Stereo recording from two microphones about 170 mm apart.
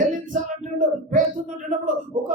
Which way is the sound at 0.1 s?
50° right (ahead or behind).